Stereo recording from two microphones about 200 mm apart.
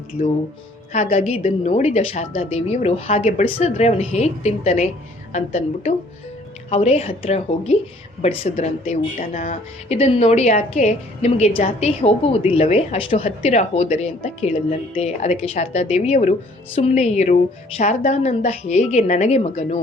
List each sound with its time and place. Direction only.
0.9 s a woman's voice: 35° left (ahead or behind)